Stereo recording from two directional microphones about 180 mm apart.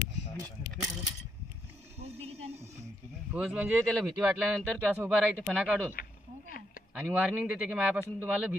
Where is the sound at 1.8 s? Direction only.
35° right (ahead or behind).